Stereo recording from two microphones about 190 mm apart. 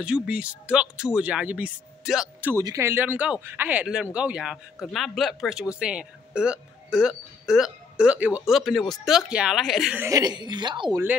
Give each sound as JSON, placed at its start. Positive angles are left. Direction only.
{"t": 0.0, "sound": "speech", "side_deg": -5}
{"t": 2.5, "sound": "speech", "side_deg": -15}
{"t": 10.0, "sound": "a woman's voice", "side_deg": -20}